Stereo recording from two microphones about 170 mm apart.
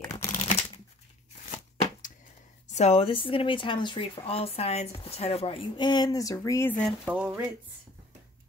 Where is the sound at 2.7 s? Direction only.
40° left (ahead or behind); by 6.7 s 20° left (ahead or behind).